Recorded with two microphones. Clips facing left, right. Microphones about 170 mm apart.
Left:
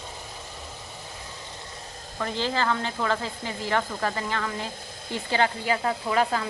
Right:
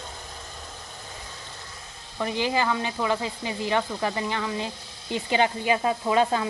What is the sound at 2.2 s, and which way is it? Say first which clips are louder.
Speech: right 2 dB; 15° right (ahead or behind).